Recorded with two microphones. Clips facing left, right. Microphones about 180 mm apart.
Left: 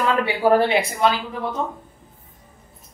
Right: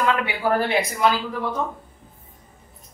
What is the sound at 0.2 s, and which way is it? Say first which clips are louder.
Speech: left 5 dB; 30° left (ahead or behind).